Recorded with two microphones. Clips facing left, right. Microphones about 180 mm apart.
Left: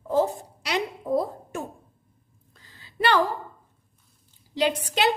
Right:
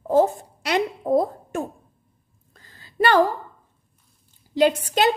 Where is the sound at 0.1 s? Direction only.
55° right (ahead or behind).